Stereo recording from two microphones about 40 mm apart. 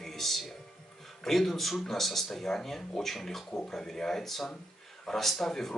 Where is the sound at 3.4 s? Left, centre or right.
Centre.